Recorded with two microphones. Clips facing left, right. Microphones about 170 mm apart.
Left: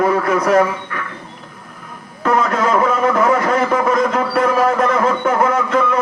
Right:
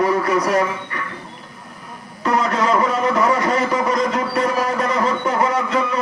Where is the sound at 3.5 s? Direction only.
50° left (ahead or behind).